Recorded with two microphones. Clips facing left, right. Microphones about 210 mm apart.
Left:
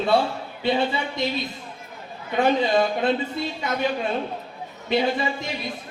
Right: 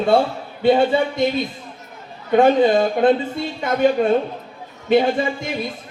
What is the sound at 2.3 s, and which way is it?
A man's voice, 50° right (ahead or behind).